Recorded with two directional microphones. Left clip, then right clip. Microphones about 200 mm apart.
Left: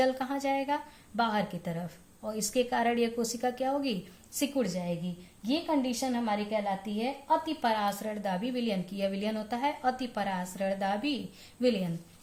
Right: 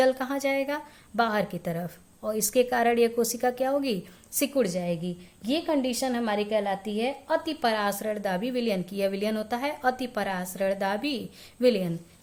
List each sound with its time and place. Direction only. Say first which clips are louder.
0.0 s a woman's voice: right 5 dB; 40° right (ahead or behind)